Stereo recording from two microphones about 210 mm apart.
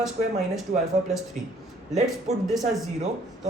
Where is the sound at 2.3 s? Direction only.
30° right (ahead or behind).